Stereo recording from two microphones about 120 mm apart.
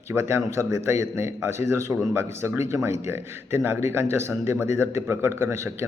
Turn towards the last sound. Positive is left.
turn(degrees=-20)  # may be behind; listen again after turning